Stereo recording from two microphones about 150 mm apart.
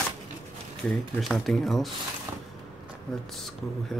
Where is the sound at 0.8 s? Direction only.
Centre (ahead or behind).